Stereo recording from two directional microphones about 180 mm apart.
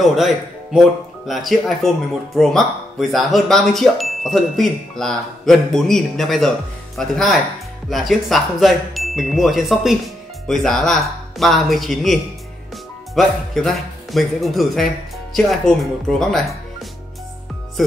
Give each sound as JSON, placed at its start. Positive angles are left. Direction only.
{"t": 0.0, "sound": "speech", "side_deg": 0}
{"t": 17.8, "sound": "speech", "side_deg": 0}